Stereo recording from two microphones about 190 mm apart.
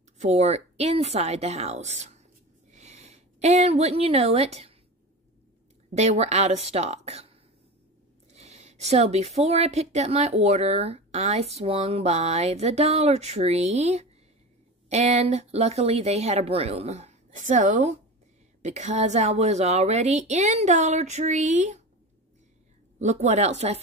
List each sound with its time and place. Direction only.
0.2 s speech: 35° right (ahead or behind)
2.7 s a sound: 35° right (ahead or behind)
5.9 s speech: 35° right (ahead or behind)
22.9 s speech: 35° right (ahead or behind)